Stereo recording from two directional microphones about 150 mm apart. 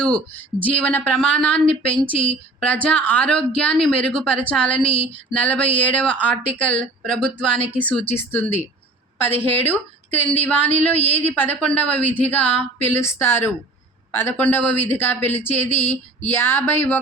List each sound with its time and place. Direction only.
0.0 s a man's voice: 10° left (ahead or behind)
4.8 s speech: 40° left (ahead or behind)
5.3 s a man's voice: 10° left (ahead or behind)